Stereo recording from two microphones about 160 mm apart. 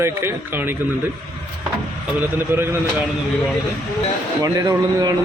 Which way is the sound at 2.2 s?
15° right (ahead or behind).